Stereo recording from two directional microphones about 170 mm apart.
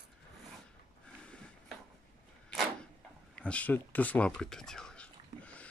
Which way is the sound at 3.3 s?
5° left (ahead or behind).